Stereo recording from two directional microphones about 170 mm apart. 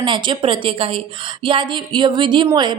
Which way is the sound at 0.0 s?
30° right (ahead or behind).